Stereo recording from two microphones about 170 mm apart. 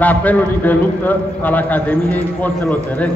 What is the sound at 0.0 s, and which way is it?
A man's voice, 10° left (ahead or behind).